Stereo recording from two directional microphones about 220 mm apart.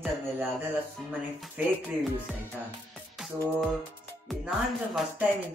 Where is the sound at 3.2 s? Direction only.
Centre (ahead or behind).